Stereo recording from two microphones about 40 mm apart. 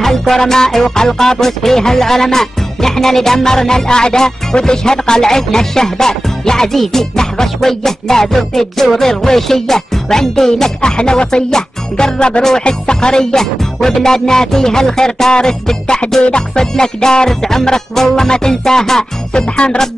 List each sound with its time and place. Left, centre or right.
0.0 s music: centre; by 19.8 s left